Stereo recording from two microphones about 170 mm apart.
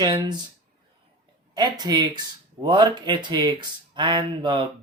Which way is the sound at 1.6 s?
25° right (ahead or behind).